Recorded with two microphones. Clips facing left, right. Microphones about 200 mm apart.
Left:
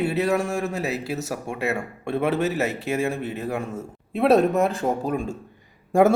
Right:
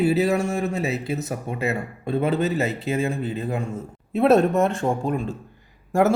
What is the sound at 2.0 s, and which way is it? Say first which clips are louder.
Speech: right 1 dB; 75° left (ahead or behind).